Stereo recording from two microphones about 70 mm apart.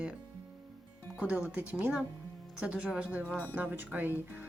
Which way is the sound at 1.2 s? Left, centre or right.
Centre.